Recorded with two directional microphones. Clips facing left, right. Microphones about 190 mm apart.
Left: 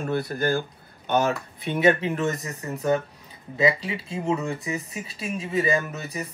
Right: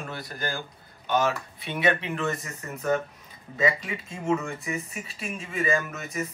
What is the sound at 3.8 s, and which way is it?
Speech, 35° left (ahead or behind).